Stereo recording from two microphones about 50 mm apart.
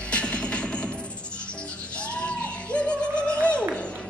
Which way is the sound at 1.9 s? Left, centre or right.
Left.